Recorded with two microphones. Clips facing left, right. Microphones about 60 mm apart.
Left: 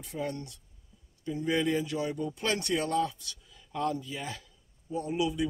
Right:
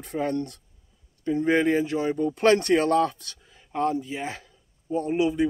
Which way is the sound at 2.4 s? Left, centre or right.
Right.